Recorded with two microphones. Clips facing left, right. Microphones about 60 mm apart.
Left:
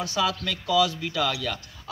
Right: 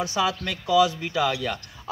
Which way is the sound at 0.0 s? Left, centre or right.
Centre.